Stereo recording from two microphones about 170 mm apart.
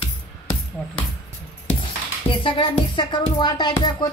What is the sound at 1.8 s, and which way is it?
A child's voice, 30° left (ahead or behind).